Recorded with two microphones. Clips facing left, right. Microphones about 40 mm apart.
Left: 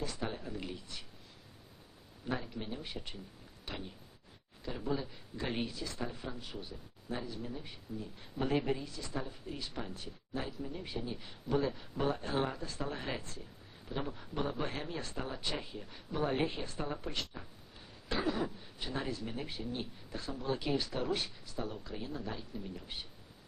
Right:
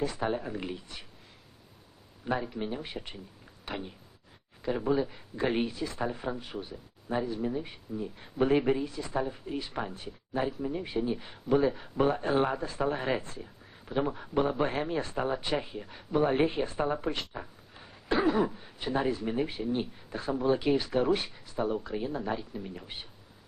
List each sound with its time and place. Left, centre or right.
0.0 s speech: right
2.2 s speech: right